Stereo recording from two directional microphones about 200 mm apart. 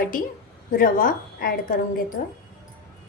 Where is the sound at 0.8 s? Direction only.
45° left (ahead or behind).